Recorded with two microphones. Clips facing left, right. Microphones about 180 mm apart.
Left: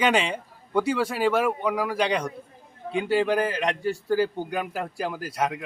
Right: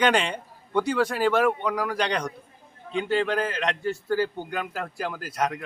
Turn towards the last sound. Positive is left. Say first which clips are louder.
# left 1 dB
turn(degrees=10)  # may be behind; listen again after turning